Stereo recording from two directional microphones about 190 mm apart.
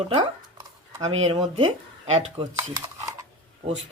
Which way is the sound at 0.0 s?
25° right (ahead or behind).